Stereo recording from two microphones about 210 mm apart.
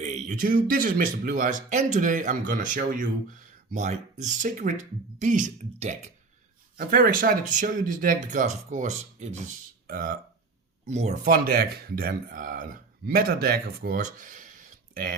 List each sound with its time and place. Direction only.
0.0 s speech: 35° right (ahead or behind)